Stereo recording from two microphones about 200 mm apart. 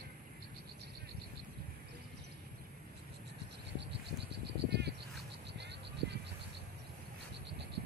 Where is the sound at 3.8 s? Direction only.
55° right (ahead or behind).